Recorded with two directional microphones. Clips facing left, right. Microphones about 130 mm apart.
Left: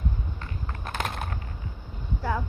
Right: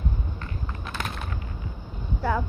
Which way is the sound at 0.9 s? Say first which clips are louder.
Left 3 dB; 50° left (ahead or behind).